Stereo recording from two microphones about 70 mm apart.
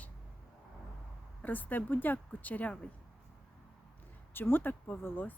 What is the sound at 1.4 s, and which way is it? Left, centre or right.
Speech, left.